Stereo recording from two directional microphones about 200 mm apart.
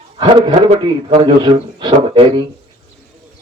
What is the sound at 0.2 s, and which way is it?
Speech, 25° right (ahead or behind).